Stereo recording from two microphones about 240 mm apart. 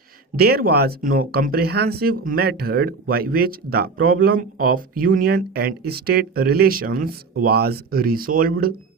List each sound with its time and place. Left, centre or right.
0.3 s speech: right